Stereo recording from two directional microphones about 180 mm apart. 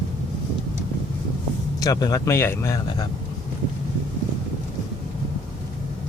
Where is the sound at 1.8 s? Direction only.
20° left (ahead or behind).